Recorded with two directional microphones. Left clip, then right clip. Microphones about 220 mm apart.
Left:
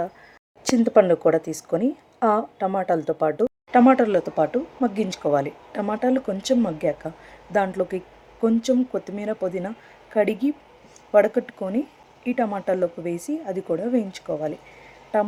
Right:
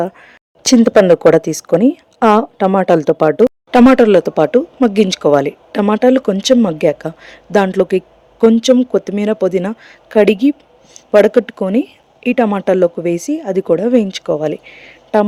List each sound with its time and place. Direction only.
0.0 s speech: 45° right (ahead or behind)